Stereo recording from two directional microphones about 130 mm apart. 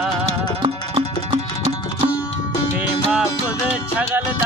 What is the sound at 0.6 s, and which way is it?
Music, 45° right (ahead or behind).